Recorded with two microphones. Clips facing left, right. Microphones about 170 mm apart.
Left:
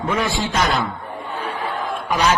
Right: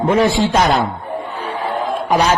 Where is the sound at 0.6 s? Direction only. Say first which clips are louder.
Right 5 dB; 50° right (ahead or behind).